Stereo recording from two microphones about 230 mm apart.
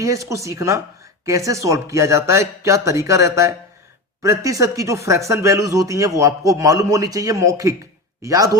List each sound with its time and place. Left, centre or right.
0.0 s speech: centre